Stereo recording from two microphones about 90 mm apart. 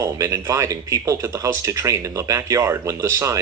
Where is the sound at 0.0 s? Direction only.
35° right (ahead or behind).